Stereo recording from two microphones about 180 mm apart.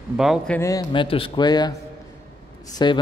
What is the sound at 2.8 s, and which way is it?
Speech, 25° left (ahead or behind).